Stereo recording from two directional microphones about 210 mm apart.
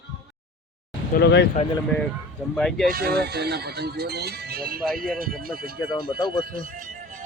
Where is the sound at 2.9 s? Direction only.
50° right (ahead or behind).